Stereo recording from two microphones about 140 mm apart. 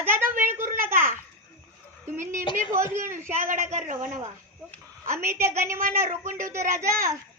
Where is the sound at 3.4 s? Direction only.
55° right (ahead or behind).